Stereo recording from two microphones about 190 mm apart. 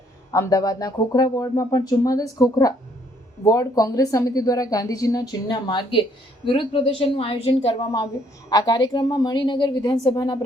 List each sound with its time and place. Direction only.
0.3 s a woman's voice: 20° left (ahead or behind)